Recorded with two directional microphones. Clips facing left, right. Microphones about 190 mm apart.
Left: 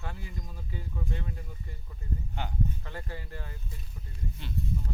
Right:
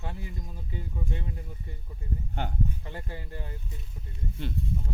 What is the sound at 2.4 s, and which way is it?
Speech, 50° right (ahead or behind).